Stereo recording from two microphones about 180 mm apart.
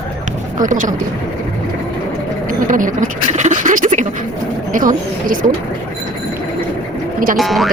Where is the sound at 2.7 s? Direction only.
45° right (ahead or behind).